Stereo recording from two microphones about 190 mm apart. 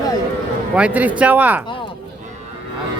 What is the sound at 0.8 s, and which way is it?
Speech, 10° right (ahead or behind).